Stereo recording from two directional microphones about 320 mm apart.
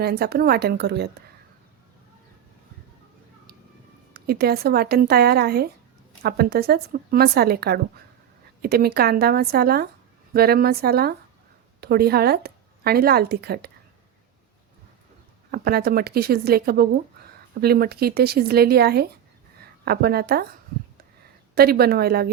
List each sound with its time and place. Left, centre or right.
0.0 s a woman's voice: right
4.3 s a woman's voice: right
15.5 s a woman's voice: right
21.5 s a woman's voice: right